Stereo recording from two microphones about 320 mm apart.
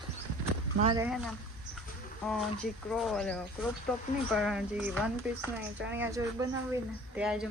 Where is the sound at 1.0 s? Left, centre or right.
Centre.